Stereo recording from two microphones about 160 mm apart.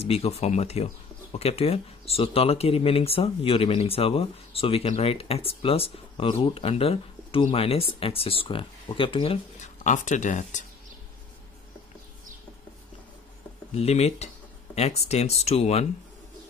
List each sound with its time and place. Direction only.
0.0 s speech: 40° left (ahead or behind)
9.6 s speech: 50° left (ahead or behind)
13.7 s speech: 40° left (ahead or behind)